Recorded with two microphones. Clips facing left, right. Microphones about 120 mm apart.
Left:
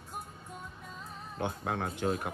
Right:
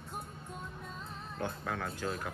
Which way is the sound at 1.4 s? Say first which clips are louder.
Left 4 dB; 55° left (ahead or behind).